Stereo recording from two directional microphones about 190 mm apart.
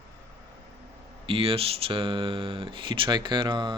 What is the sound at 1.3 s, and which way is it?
Speech, 30° right (ahead or behind).